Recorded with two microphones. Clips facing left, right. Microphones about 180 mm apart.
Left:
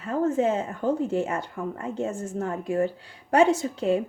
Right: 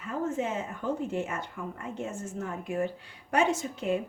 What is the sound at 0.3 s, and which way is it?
Speech, 35° left (ahead or behind).